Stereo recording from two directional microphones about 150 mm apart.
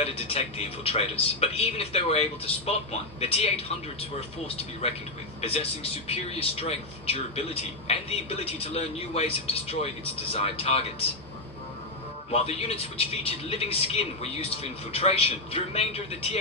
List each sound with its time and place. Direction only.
0.0 s a man's voice: 40° left (ahead or behind)
5.4 s a man's voice: 40° left (ahead or behind)
12.3 s a man's voice: 40° left (ahead or behind)